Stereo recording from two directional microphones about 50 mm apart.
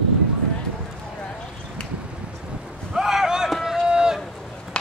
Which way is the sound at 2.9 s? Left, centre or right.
Centre.